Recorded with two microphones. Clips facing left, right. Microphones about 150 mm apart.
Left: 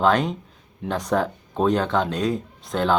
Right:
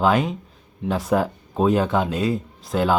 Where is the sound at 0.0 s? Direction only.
5° right (ahead or behind).